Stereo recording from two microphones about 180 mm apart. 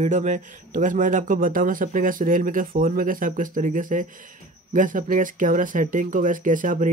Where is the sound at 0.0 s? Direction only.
40° right (ahead or behind).